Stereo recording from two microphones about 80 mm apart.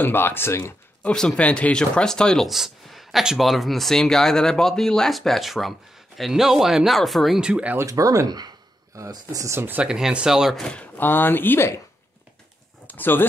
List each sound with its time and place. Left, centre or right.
0.0 s speech: left
1.0 s speech: centre
7.3 s speech: centre
7.8 s speech: right
8.3 s a sound: right
9.1 s speech: right
9.6 s speech: right
9.8 s speech: centre
10.6 s speech: centre; by 11.8 s left
12.8 s speech: left